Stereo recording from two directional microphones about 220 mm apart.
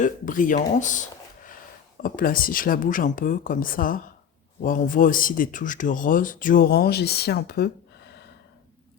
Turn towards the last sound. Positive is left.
turn(degrees=45)  # may be behind; listen again after turning